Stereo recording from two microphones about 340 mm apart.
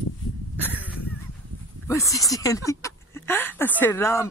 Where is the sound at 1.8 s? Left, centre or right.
Centre.